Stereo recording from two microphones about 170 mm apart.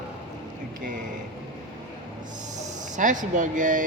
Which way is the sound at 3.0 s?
50° right (ahead or behind).